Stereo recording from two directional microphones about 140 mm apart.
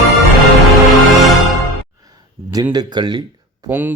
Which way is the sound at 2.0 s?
25° right (ahead or behind).